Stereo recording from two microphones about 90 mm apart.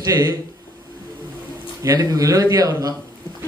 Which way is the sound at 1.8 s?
40° right (ahead or behind).